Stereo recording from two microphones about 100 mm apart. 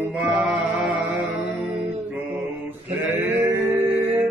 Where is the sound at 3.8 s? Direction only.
15° right (ahead or behind).